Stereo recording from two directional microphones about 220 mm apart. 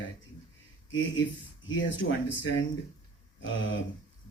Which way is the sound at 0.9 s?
60° left (ahead or behind).